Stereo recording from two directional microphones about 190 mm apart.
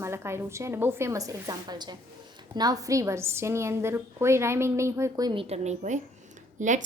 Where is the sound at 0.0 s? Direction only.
15° right (ahead or behind).